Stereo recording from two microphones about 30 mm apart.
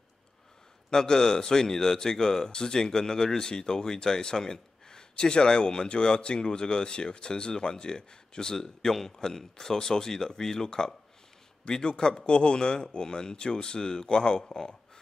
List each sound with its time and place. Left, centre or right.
0.8 s a man's voice: left